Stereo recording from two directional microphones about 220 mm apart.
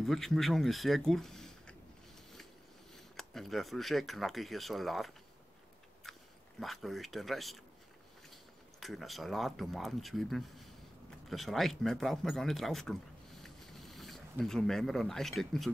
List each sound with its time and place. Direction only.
0.0 s speech: centre (ahead or behind)
3.2 s speech: centre (ahead or behind)
6.0 s biting: centre (ahead or behind)
6.6 s speech: centre (ahead or behind)
13.4 s a sound: centre (ahead or behind)